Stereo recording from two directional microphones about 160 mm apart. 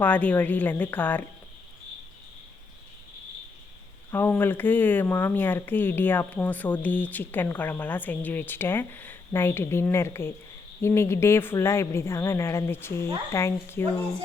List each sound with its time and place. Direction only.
0.0 s speech: 10° left (ahead or behind)
4.1 s speech: 10° left (ahead or behind)